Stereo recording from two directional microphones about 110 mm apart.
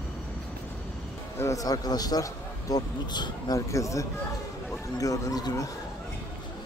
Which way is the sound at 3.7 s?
30° left (ahead or behind).